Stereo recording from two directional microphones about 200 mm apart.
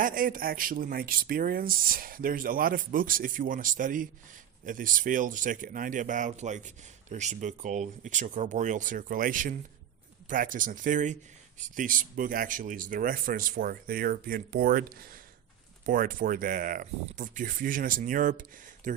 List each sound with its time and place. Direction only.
0.0 s speech: 45° right (ahead or behind)